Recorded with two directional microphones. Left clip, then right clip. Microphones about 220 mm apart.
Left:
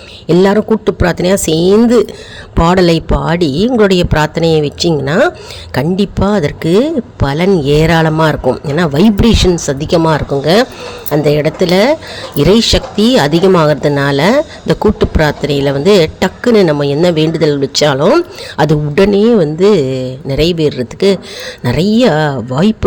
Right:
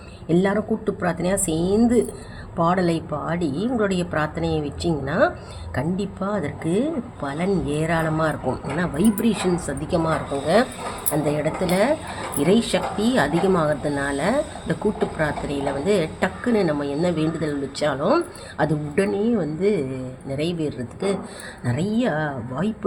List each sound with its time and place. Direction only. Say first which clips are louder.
0.3 s speech: left 12 dB; 45° left (ahead or behind)